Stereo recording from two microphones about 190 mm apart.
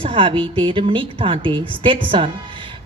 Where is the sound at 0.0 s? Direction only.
25° right (ahead or behind).